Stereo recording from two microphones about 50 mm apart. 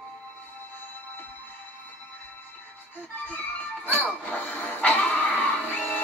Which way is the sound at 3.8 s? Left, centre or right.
Left.